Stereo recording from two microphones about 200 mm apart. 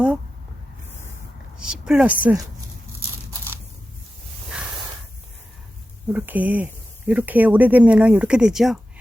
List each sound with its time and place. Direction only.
1.5 s a woman's voice: 5° right (ahead or behind)
6.1 s speech: 10° right (ahead or behind)